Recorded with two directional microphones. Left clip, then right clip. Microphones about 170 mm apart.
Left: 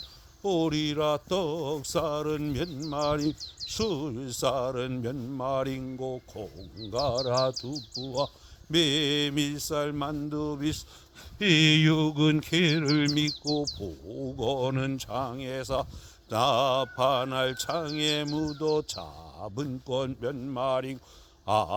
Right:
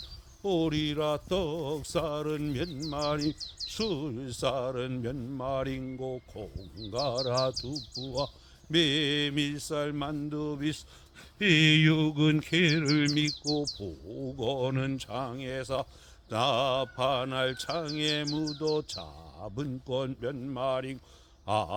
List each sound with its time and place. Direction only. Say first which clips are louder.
0.4 s speech: left 2 dB; 35° left (ahead or behind)
6.6 s speech: left 3 dB; 25° left (ahead or behind)
11.3 s mantra: left 1 dB; 25° left (ahead or behind)
13.8 s speech: left 2 dB; 30° left (ahead or behind)